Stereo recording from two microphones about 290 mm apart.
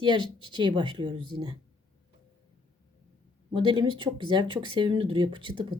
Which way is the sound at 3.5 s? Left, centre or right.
Centre.